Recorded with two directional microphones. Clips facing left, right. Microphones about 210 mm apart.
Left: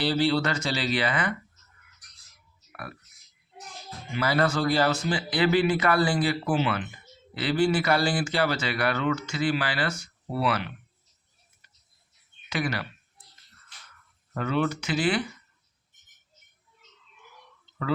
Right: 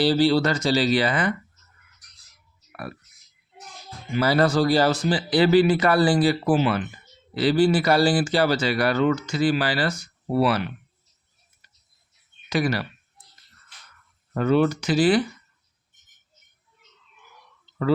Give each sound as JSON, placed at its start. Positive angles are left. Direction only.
{"t": 0.0, "sound": "speech", "side_deg": -35}
{"t": 4.1, "sound": "speech", "side_deg": -35}
{"t": 12.5, "sound": "speech", "side_deg": -35}
{"t": 14.3, "sound": "speech", "side_deg": -40}